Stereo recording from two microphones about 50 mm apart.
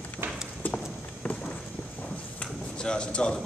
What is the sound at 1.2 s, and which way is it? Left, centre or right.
Walk, left.